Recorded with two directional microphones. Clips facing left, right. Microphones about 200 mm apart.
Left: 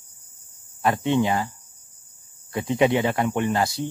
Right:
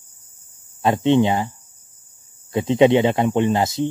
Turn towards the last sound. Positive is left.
turn(degrees=-20)  # may be behind; listen again after turning